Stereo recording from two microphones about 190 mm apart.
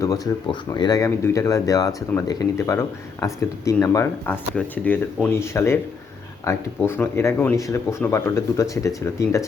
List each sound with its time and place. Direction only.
0.0 s speech: 20° left (ahead or behind)